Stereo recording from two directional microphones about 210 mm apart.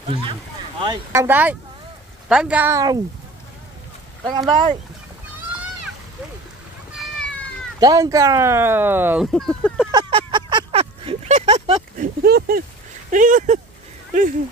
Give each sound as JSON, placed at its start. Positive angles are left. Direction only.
{"t": 0.0, "sound": "speech", "side_deg": -25}
{"t": 1.2, "sound": "speech", "side_deg": -10}
{"t": 4.2, "sound": "speech", "side_deg": -20}
{"t": 7.8, "sound": "speech", "side_deg": -15}
{"t": 9.3, "sound": "speech", "side_deg": 5}
{"t": 9.8, "sound": "a sound", "side_deg": -20}
{"t": 12.2, "sound": "speech", "side_deg": -45}